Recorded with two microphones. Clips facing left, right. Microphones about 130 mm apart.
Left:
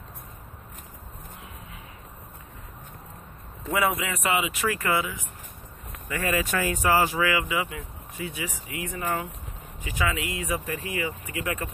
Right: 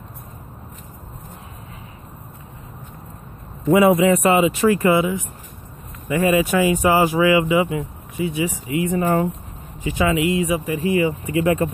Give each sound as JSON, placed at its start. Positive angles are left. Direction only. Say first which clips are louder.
{"t": 3.7, "sound": "speech", "louder": "right 12 dB", "side_deg": -30}
{"t": 8.9, "sound": "speech", "louder": "right 10 dB", "side_deg": -40}
{"t": 9.8, "sound": "speech", "louder": "right 10 dB", "side_deg": -25}